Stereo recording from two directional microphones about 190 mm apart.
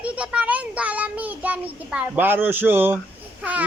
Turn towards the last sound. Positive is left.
turn(degrees=-5)  # may be behind; listen again after turning